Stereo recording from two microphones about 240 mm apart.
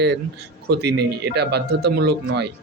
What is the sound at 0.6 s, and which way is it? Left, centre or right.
Speech, right.